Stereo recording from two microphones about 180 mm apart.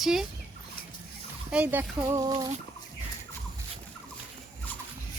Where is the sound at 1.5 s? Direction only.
10° right (ahead or behind).